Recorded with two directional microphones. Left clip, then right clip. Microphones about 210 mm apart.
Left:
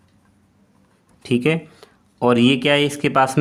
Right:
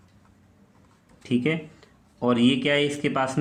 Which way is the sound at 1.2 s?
45° left (ahead or behind).